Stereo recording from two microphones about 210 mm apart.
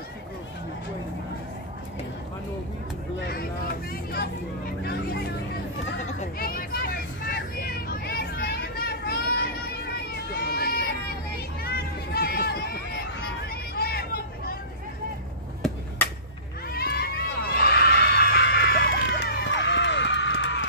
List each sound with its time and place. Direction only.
3.2 s vehicle: 50° left (ahead or behind)
10.5 s a sound: 45° left (ahead or behind)
16.6 s screaming: 45° left (ahead or behind)